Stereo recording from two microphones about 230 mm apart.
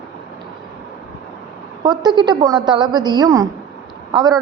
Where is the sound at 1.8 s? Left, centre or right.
Centre.